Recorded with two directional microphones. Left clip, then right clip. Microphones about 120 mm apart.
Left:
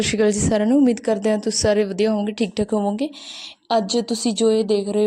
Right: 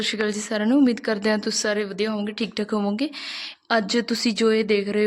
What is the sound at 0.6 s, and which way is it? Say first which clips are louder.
Speech: right 1 dB; 30° left (ahead or behind).